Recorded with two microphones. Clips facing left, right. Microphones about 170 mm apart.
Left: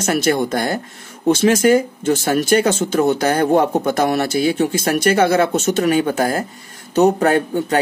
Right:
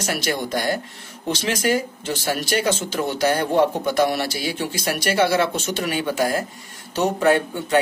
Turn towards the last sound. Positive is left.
turn(degrees=40)  # may be behind; listen again after turning